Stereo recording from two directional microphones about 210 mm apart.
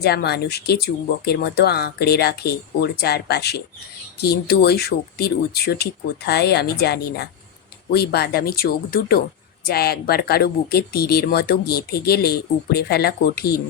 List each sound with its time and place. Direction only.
0.0 s speech: 50° left (ahead or behind)